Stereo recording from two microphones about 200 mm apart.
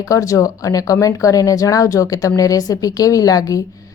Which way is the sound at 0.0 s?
15° left (ahead or behind).